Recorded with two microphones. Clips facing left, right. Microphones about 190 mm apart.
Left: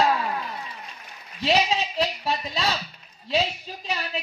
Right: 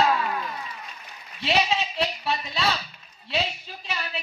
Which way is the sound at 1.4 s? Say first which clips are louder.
Left 2 dB; 35° left (ahead or behind).